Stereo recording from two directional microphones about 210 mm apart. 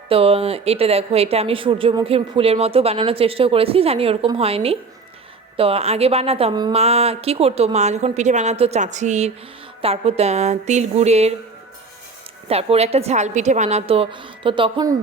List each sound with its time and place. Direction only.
0.1 s a woman's voice: 25° right (ahead or behind)
12.5 s speech: 30° right (ahead or behind)